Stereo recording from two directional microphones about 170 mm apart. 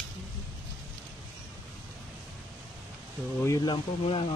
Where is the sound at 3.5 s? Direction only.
25° left (ahead or behind).